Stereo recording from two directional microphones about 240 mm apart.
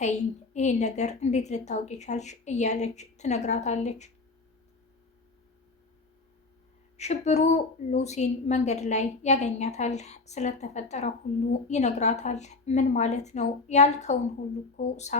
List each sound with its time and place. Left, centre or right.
0.0 s a woman's voice: left
6.9 s a woman's voice: left